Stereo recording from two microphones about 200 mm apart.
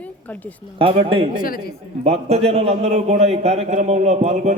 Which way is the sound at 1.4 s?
45° left (ahead or behind).